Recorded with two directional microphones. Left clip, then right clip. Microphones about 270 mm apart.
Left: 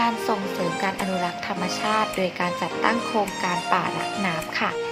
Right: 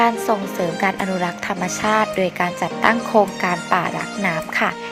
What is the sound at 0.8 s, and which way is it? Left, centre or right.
Speech, right.